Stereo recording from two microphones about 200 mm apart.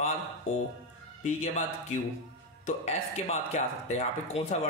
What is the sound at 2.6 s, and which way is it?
Speech, 35° left (ahead or behind).